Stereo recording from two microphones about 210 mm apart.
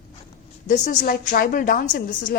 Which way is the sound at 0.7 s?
40° left (ahead or behind).